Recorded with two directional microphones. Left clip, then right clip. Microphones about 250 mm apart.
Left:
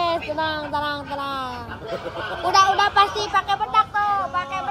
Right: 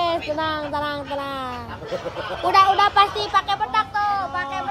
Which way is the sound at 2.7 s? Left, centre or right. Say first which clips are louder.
Right 1 dB; centre.